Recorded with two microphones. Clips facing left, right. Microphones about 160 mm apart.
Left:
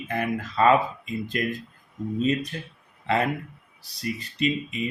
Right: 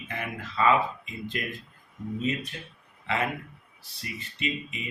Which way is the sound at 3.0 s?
35° left (ahead or behind).